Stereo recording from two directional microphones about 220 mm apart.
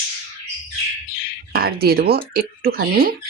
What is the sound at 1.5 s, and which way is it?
Speech, 45° right (ahead or behind).